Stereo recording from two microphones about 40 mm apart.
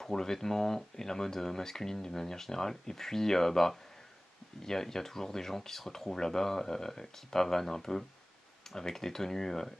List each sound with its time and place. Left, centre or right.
0.0 s speech: centre